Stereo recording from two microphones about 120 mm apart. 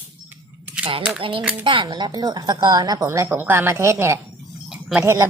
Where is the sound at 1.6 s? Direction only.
40° right (ahead or behind).